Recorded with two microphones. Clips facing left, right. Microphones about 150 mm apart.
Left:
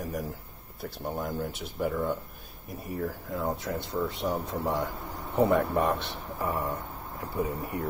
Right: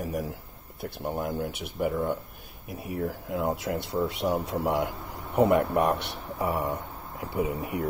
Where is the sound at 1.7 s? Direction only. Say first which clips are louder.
Right 2 dB; 10° right (ahead or behind).